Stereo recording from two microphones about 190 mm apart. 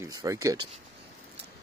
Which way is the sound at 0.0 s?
15° right (ahead or behind).